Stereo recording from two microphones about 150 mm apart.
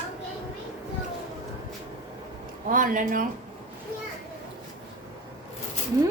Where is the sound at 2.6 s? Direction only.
65° right (ahead or behind).